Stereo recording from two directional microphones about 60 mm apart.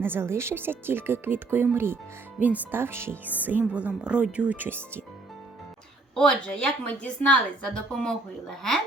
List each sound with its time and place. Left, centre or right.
0.0 s speech: right
3.2 s speech: right
6.1 s a woman's voice: centre